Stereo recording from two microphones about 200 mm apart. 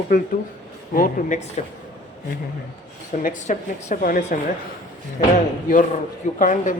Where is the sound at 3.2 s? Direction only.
40° left (ahead or behind).